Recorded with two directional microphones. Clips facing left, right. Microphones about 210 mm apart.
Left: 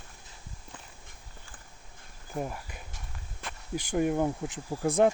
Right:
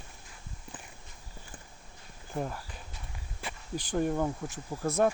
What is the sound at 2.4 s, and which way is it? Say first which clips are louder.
Speech: even; 5° left (ahead or behind).